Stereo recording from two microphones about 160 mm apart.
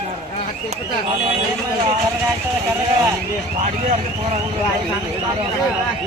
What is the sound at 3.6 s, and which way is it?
Speech, 40° right (ahead or behind).